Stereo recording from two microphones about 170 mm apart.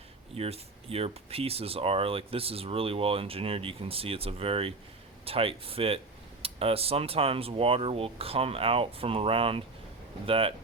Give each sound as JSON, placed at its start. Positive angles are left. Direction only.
{"t": 0.3, "sound": "speech", "side_deg": -35}